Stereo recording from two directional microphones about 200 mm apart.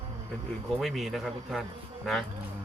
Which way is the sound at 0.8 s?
Centre (ahead or behind).